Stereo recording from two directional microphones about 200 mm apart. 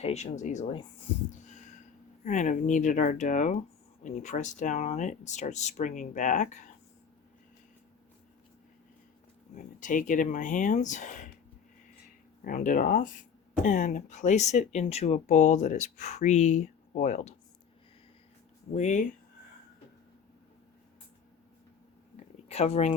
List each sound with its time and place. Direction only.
0.0 s speech: 35° left (ahead or behind)
1.5 s a sound: 40° left (ahead or behind)
2.2 s speech: 35° left (ahead or behind)
9.6 s speech: 40° left (ahead or behind)
12.5 s speech: 40° left (ahead or behind)
18.7 s speech: 35° left (ahead or behind)
22.4 s speech: 30° left (ahead or behind)